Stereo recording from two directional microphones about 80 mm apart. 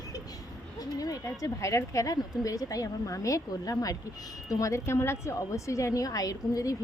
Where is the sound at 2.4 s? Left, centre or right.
Left.